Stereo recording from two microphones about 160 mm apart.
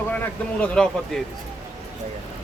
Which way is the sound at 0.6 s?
5° left (ahead or behind).